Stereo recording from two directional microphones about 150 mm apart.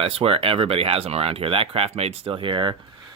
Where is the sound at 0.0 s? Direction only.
40° right (ahead or behind).